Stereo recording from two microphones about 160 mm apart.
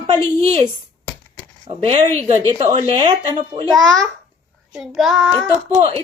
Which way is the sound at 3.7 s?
Centre (ahead or behind).